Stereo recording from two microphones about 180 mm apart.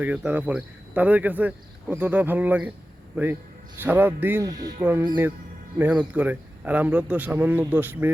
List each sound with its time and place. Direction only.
0.0 s speech: 10° right (ahead or behind)
3.8 s speech: 10° right (ahead or behind)